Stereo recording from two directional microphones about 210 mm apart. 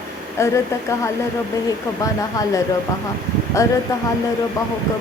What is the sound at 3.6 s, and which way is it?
Speech, 15° left (ahead or behind).